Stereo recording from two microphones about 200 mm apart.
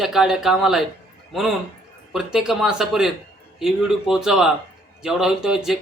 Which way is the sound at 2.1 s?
5° right (ahead or behind).